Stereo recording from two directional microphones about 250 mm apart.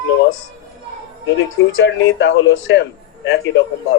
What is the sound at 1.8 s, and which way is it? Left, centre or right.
Speech, left.